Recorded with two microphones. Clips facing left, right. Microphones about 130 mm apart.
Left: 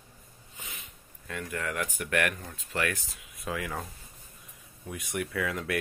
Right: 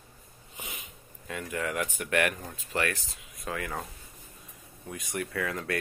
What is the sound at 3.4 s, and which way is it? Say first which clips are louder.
Speech: even; centre (ahead or behind).